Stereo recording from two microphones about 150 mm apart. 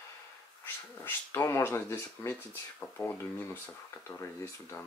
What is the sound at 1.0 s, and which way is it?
Speech, 15° left (ahead or behind).